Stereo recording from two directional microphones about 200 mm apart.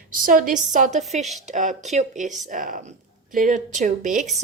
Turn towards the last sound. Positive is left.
turn(degrees=-40)  # may be behind; listen again after turning